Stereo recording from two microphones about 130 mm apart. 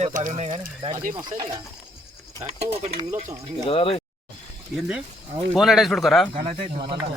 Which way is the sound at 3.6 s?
45° left (ahead or behind).